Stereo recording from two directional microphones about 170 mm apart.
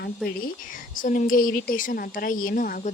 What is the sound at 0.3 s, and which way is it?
Speech, 55° left (ahead or behind).